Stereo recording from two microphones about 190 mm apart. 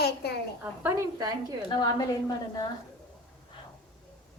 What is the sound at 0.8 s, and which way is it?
Speech, 15° right (ahead or behind).